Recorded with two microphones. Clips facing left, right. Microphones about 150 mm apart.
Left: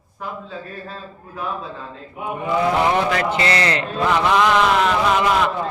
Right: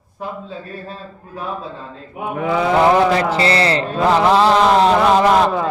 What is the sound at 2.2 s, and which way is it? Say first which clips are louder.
Mantra: right 2 dB; 90° right.